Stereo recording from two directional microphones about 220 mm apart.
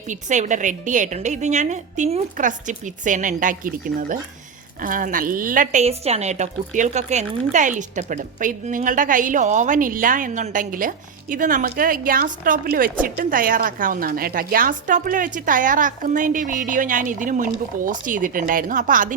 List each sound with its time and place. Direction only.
0.1 s a woman's voice: 35° right (ahead or behind)